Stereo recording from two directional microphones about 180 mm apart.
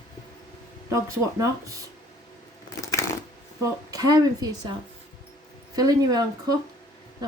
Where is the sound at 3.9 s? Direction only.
20° right (ahead or behind).